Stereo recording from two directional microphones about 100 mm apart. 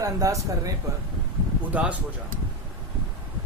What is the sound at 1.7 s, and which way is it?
Speech, 15° right (ahead or behind).